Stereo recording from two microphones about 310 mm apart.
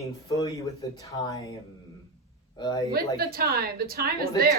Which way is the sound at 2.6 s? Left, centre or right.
Centre.